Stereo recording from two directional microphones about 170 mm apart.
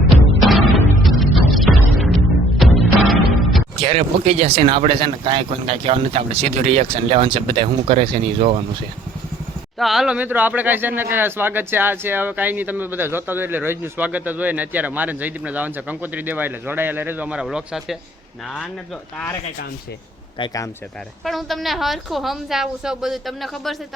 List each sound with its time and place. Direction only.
0.3 s music: centre (ahead or behind)
3.8 s speech: 35° right (ahead or behind)
9.7 s speech: centre (ahead or behind)
20.4 s speech: 20° left (ahead or behind)
21.2 s a woman's voice: centre (ahead or behind)